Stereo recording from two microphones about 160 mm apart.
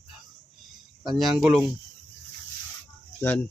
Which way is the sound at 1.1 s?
5° right (ahead or behind).